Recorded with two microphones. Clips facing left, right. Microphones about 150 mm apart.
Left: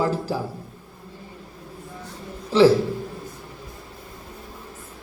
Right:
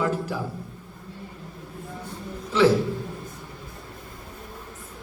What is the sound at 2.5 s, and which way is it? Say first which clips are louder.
Speech: left 4 dB; 30° left (ahead or behind).